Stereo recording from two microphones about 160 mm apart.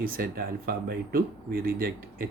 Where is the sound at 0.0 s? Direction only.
65° right (ahead or behind).